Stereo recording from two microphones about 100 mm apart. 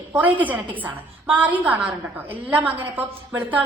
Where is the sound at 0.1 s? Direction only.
15° right (ahead or behind).